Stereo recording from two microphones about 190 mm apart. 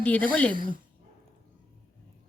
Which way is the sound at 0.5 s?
50° right (ahead or behind).